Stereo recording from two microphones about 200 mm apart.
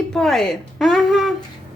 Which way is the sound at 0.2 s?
Centre (ahead or behind).